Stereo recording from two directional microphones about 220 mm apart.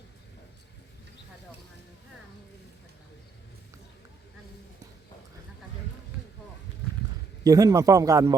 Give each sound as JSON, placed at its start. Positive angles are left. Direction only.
{"t": 7.4, "sound": "speech", "side_deg": -15}